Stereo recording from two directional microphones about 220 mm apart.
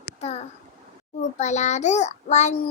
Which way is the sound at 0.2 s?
30° left (ahead or behind).